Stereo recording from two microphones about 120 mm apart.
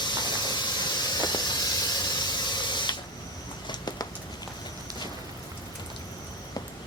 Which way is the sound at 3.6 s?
35° left (ahead or behind).